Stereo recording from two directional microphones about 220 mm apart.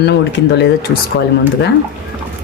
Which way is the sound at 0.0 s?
50° left (ahead or behind).